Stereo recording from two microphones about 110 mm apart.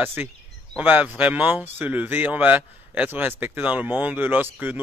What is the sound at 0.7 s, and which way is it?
A man's voice, 15° right (ahead or behind).